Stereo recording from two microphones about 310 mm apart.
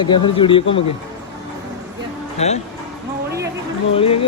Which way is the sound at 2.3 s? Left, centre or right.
Left.